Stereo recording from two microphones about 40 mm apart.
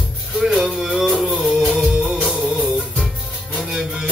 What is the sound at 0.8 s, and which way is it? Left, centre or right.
Music, centre.